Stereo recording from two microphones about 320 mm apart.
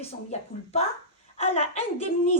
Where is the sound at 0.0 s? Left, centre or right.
Centre.